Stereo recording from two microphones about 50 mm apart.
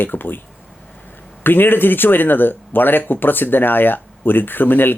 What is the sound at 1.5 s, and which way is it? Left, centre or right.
Speech, left.